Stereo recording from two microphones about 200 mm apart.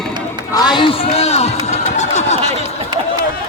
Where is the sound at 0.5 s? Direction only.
20° left (ahead or behind).